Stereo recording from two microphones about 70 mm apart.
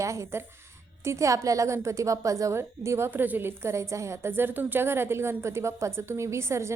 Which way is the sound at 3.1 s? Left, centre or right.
Right.